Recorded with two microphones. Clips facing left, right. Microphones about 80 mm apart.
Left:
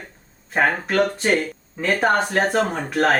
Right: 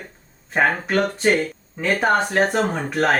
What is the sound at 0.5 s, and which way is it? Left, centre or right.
Speech, centre.